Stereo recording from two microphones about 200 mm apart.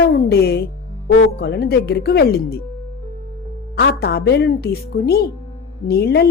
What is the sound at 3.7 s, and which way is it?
Speech, 50° left (ahead or behind).